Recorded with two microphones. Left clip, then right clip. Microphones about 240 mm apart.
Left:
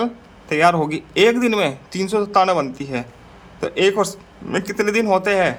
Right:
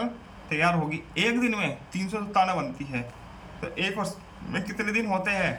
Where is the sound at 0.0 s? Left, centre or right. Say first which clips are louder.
Left 9 dB; left.